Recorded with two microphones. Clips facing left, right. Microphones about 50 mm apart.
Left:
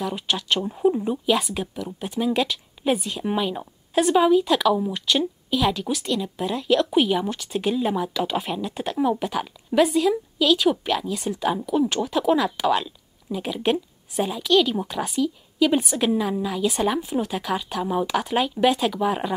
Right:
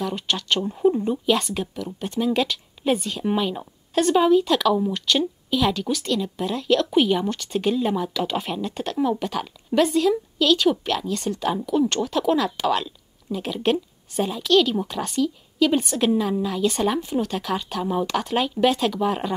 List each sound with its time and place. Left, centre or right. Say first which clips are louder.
0.0 s speech: even; centre